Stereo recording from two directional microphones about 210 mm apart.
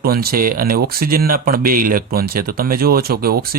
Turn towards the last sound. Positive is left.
turn(degrees=-45)  # may be behind; listen again after turning